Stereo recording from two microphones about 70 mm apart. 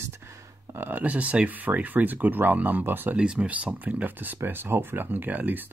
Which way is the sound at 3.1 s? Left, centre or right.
Centre.